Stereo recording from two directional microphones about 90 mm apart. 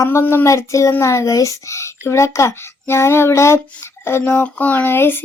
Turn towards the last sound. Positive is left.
turn(degrees=25)  # may be behind; listen again after turning